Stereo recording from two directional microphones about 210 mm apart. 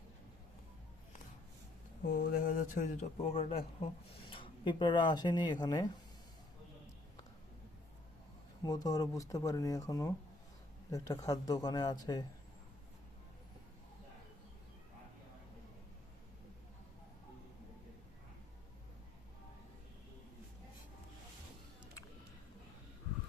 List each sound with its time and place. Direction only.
2.0 s speech: 40° left (ahead or behind); by 5.9 s 20° left (ahead or behind)
8.6 s speech: 20° left (ahead or behind)